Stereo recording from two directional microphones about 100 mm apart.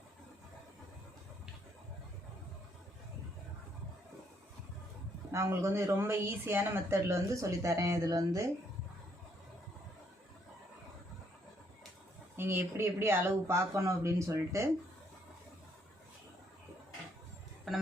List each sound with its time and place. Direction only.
5.3 s speech: 30° right (ahead or behind)
12.4 s speech: 20° right (ahead or behind)
17.7 s speech: centre (ahead or behind)